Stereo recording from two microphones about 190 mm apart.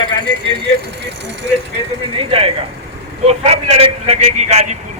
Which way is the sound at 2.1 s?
30° right (ahead or behind).